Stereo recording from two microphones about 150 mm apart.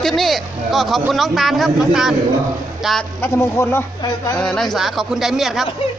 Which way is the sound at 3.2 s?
15° left (ahead or behind).